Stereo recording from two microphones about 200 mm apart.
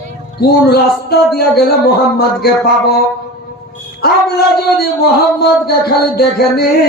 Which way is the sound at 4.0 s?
50° left (ahead or behind).